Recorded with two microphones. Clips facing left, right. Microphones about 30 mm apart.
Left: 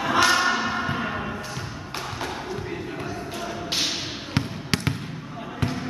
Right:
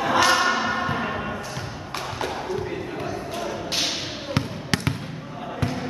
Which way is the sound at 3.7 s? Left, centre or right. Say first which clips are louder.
Left 1 dB; centre.